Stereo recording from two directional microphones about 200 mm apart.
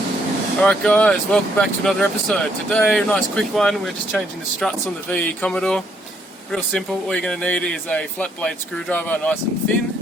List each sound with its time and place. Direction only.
0.6 s speech: 5° left (ahead or behind)